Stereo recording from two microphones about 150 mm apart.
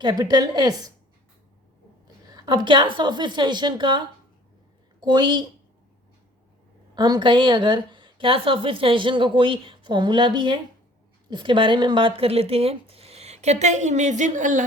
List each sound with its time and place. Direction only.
0.0 s a woman's voice: 30° right (ahead or behind)
2.3 s a woman's voice: 30° right (ahead or behind)
6.9 s a woman's voice: 25° right (ahead or behind); by 14.6 s 55° right (ahead or behind)